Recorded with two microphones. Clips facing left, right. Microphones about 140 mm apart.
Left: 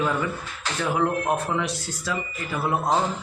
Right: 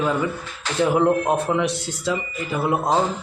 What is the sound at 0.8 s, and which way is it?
Speech, 20° right (ahead or behind).